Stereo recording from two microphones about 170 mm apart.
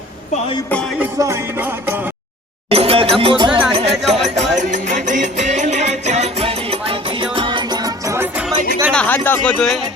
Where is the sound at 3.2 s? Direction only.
30° right (ahead or behind).